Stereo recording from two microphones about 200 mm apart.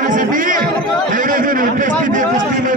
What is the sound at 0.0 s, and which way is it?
Chatter, 40° right (ahead or behind).